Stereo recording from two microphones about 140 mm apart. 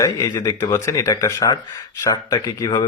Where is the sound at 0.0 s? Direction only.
25° left (ahead or behind).